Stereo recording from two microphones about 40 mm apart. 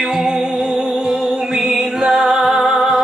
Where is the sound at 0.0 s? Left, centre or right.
Centre.